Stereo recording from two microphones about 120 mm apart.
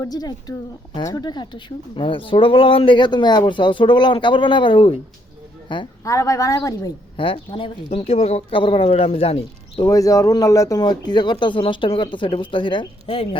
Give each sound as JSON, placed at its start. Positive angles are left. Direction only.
{"t": 0.0, "sound": "speech", "side_deg": 35}
{"t": 6.1, "sound": "a woman's voice", "side_deg": 25}
{"t": 7.2, "sound": "speech", "side_deg": 45}
{"t": 7.9, "sound": "speech", "side_deg": 60}
{"t": 9.8, "sound": "speech", "side_deg": 30}